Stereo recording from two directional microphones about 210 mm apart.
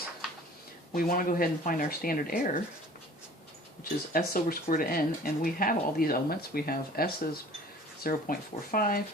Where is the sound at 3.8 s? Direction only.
45° left (ahead or behind).